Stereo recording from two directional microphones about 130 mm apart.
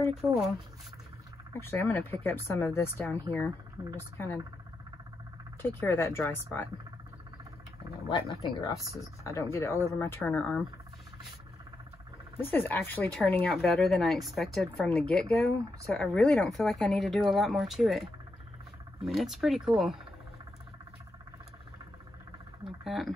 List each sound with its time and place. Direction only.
0.2 s speech: centre (ahead or behind)
1.5 s speech: 20° left (ahead or behind)
5.6 s speech: 20° left (ahead or behind)
8.4 s speech: 40° left (ahead or behind)
9.2 s speech: 20° left (ahead or behind)
12.4 s speech: 15° left (ahead or behind); by 20.0 s centre (ahead or behind)
22.6 s speech: centre (ahead or behind)